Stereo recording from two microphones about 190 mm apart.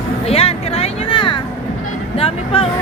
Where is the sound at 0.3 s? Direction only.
30° left (ahead or behind).